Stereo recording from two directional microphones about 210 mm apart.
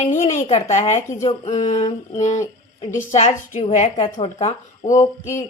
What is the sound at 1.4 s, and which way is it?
Speech, 30° left (ahead or behind).